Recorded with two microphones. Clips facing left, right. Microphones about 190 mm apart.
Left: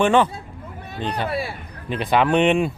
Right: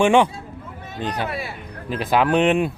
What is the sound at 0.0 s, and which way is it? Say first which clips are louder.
Speech: right 1 dB; 10° right (ahead or behind).